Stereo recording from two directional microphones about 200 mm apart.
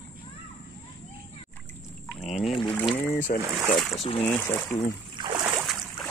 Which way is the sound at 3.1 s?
40° left (ahead or behind).